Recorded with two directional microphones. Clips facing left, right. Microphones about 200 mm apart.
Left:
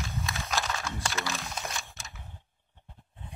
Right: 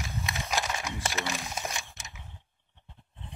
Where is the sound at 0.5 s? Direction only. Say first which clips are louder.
Right 1 dB; 20° right (ahead or behind).